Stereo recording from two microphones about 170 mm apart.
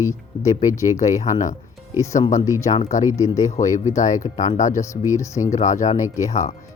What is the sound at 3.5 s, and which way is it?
Speech, 45° left (ahead or behind).